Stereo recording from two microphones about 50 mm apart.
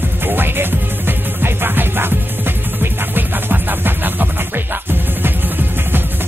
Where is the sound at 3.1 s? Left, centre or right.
Right.